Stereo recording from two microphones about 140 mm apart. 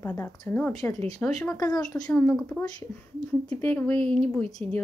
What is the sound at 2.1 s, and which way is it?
Speech, 5° left (ahead or behind).